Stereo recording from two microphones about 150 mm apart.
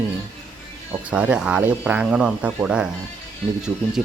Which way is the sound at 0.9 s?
10° right (ahead or behind).